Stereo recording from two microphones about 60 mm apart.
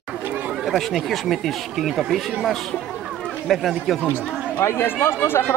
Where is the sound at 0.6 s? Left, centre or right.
Centre.